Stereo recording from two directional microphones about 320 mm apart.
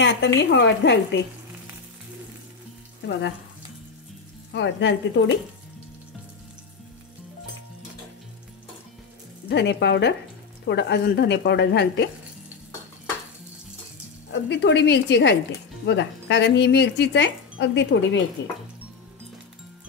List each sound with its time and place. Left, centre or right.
0.0 s speech: left
3.0 s speech: left
4.5 s speech: left
9.5 s speech: left
14.3 s speech: left